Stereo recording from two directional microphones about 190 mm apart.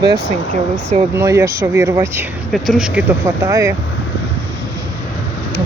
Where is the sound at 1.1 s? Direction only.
15° right (ahead or behind).